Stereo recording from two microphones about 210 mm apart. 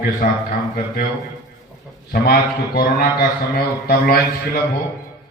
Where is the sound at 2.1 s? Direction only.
45° left (ahead or behind).